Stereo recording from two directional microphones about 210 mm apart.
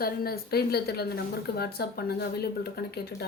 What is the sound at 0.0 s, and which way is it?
A woman's voice, 45° left (ahead or behind).